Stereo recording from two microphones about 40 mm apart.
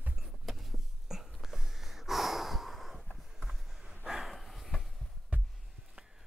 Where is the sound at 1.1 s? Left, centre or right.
Centre.